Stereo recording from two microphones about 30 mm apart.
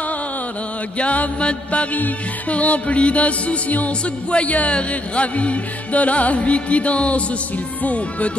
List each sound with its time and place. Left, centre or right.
0.9 s music: left
1.4 s mantra: left
2.5 s music: left
4.5 s speech: left
4.7 s music: left